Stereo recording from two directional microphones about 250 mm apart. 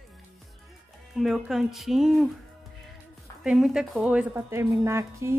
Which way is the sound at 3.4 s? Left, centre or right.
Centre.